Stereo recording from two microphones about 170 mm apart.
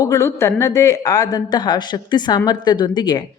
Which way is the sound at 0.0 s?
15° left (ahead or behind).